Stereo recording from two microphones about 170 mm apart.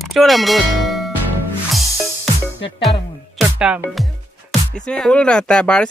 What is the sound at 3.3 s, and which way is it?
Music, 5° right (ahead or behind).